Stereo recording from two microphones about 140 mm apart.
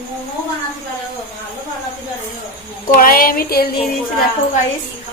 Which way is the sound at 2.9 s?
90° left.